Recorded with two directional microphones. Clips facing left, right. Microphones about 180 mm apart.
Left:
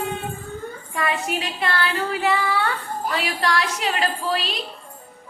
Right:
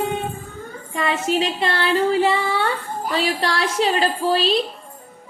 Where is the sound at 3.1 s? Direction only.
30° right (ahead or behind).